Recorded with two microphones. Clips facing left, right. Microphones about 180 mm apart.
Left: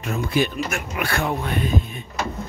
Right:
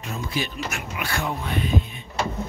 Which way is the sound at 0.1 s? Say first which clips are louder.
Left 7 dB; 55° left (ahead or behind).